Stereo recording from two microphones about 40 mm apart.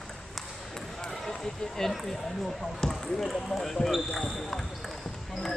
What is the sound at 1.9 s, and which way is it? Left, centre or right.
Speech, centre.